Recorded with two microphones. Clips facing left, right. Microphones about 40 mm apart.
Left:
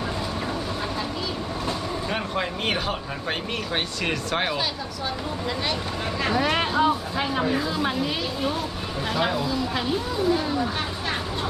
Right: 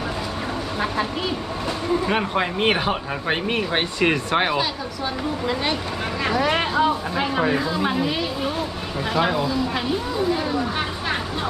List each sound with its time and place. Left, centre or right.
2.0 s speech: right
6.2 s speech: centre